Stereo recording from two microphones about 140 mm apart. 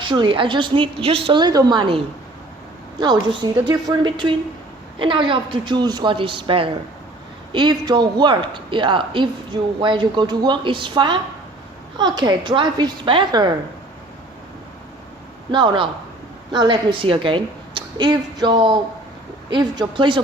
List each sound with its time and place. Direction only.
0.0 s speech: 35° right (ahead or behind)
3.0 s speech: 30° right (ahead or behind)
15.5 s a woman's voice: 35° right (ahead or behind)